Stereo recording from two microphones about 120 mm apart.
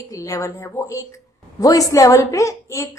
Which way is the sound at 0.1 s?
25° left (ahead or behind).